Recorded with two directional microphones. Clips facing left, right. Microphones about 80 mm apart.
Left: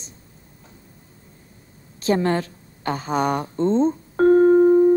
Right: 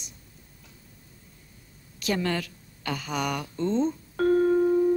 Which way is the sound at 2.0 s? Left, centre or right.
Left.